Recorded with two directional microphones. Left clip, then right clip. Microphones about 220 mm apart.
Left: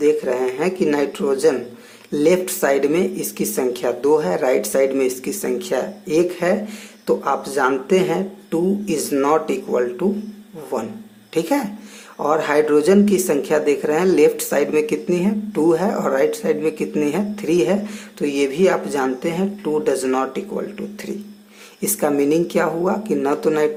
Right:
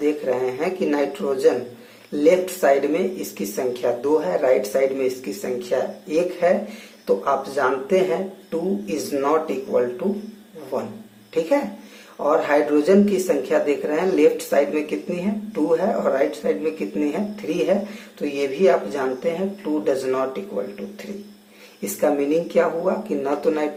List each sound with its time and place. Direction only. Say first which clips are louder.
0.0 s speech: left 4 dB; 45° left (ahead or behind)
12.2 s speech: left 1 dB; 50° left (ahead or behind)
21.8 s speech: left 2 dB; 50° left (ahead or behind)